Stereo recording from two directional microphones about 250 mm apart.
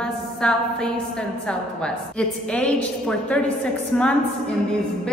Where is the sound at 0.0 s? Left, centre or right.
Centre.